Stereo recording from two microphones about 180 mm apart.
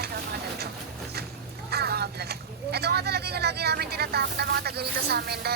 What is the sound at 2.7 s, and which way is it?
Speech, 65° right (ahead or behind).